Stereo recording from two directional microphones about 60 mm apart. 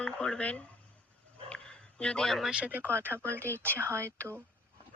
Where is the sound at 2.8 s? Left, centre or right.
Right.